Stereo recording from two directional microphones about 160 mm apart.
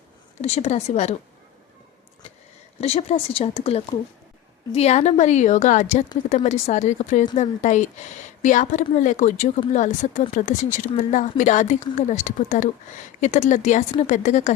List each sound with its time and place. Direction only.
0.4 s a woman's voice: 45° left (ahead or behind)
2.8 s a woman's voice: 40° left (ahead or behind)